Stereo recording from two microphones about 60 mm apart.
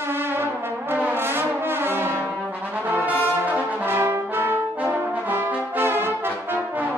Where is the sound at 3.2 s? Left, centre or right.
Right.